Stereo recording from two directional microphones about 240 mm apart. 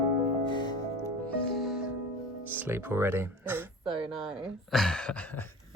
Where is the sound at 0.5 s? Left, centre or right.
Centre.